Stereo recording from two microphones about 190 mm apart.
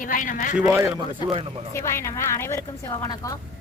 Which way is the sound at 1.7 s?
15° left (ahead or behind).